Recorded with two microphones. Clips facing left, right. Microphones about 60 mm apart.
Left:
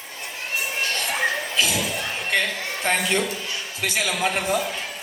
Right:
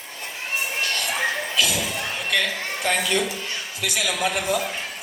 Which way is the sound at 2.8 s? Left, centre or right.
Left.